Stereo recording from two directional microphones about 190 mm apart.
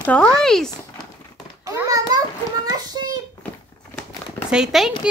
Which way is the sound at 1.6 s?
20° right (ahead or behind).